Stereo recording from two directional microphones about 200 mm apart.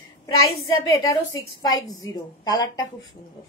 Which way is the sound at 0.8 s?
15° left (ahead or behind).